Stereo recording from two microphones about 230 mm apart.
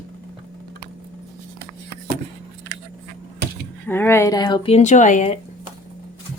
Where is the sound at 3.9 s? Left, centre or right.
Centre; by 5.4 s left.